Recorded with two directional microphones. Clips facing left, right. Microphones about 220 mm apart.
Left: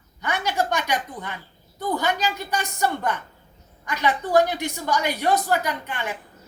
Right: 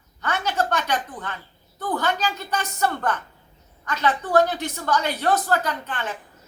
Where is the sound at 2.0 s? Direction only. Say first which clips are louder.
Right 1 dB; 10° left (ahead or behind).